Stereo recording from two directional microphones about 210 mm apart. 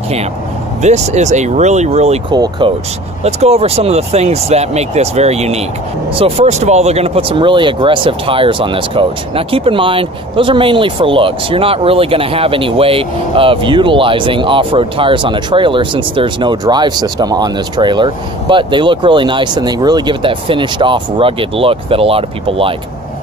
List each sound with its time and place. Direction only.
0.8 s speech: 35° right (ahead or behind)
2.3 s speech: 20° right (ahead or behind)
3.3 s speech: 30° right (ahead or behind)